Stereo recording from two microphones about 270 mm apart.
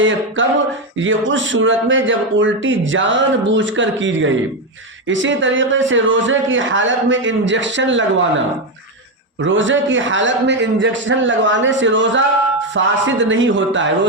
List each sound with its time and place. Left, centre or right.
0.0 s speech: right
9.4 s speech: right